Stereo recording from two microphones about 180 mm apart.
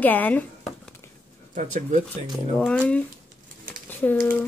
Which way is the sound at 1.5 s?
45° right (ahead or behind).